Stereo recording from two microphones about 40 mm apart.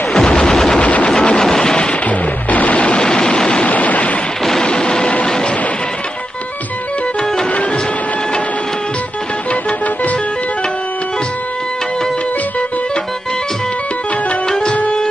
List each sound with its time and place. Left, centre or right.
0.1 s gunshot: centre
0.7 s a sound: left
1.0 s a sound: left
2.0 s music: left
3.6 s a sound: left
4.6 s music: centre
5.0 s vehicle: left
9.5 s music: left
14.5 s tabla: left